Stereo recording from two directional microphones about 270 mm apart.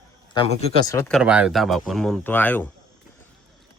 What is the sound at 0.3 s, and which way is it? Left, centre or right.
Speech, centre.